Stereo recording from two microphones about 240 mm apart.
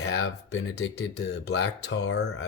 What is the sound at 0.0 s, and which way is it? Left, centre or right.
Speech, left.